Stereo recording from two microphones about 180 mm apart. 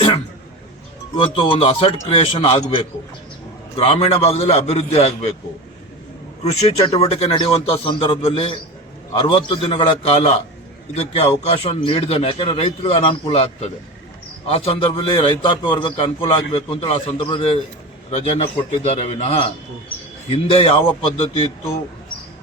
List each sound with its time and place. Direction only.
1.1 s a man's voice: 25° left (ahead or behind)
6.4 s a man's voice: 35° left (ahead or behind)